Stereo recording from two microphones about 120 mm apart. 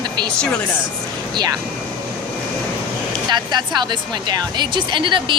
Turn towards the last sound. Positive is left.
turn(degrees=-45)  # may be behind; listen again after turning